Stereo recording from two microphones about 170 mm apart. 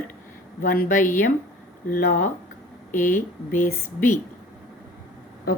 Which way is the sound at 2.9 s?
15° left (ahead or behind).